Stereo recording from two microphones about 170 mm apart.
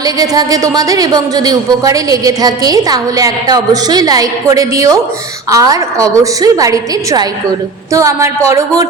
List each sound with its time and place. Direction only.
0.0 s speech: 20° right (ahead or behind)